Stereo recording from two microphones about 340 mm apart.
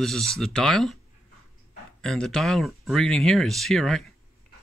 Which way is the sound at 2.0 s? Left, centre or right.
Centre.